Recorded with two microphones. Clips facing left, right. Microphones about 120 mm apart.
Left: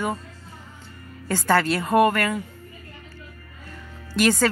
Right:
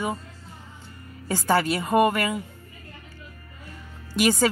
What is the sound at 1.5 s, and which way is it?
Speech, 10° right (ahead or behind).